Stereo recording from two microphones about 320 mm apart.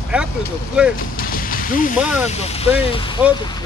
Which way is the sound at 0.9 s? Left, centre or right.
Left.